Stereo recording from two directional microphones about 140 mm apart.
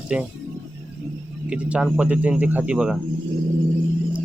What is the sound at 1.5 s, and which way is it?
Speech, 10° right (ahead or behind).